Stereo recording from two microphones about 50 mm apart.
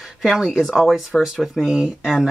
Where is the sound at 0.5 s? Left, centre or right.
Centre.